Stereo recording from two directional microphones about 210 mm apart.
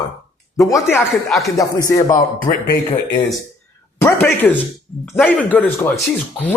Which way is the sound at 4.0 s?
10° left (ahead or behind).